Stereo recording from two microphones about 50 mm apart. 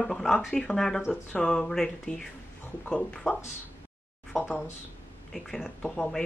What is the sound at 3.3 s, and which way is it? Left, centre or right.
Speech, centre.